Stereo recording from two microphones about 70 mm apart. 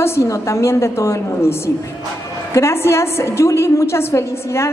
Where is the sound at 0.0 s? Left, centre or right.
Left.